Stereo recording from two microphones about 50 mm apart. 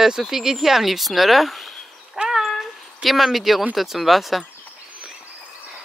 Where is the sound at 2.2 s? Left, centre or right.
Centre.